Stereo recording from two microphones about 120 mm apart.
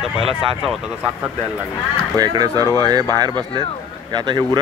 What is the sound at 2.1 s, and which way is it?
Speech, 35° right (ahead or behind).